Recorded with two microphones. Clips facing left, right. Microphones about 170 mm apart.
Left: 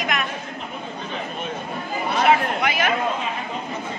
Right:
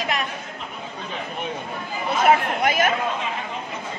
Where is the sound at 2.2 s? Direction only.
45° right (ahead or behind).